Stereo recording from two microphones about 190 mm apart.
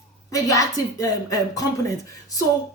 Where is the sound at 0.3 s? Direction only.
15° left (ahead or behind).